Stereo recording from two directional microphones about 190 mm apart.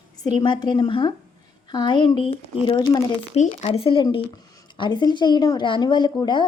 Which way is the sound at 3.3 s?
35° left (ahead or behind).